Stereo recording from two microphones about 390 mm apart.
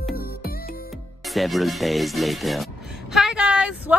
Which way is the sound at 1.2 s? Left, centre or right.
Centre.